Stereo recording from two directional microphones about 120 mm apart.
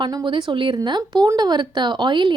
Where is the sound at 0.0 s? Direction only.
35° right (ahead or behind).